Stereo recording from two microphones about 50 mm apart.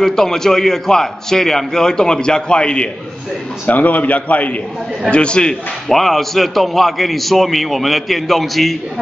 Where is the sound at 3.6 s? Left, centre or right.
Left.